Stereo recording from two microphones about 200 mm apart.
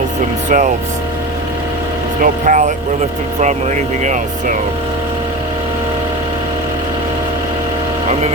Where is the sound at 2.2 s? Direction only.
40° right (ahead or behind).